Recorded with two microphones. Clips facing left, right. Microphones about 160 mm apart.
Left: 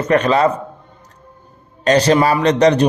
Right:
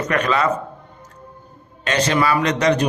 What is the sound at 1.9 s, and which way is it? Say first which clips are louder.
A man's voice: left 6 dB; 35° left (ahead or behind).